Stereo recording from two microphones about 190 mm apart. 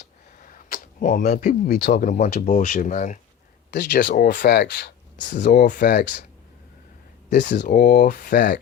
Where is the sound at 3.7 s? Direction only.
60° left (ahead or behind).